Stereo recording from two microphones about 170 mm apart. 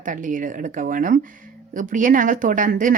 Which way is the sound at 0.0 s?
50° right (ahead or behind).